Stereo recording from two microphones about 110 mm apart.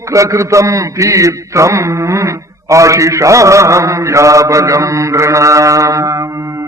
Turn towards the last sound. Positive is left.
turn(degrees=-30)  # may be behind; listen again after turning